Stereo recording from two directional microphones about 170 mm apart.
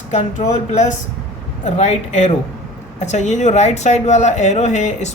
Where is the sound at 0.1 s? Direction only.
45° left (ahead or behind).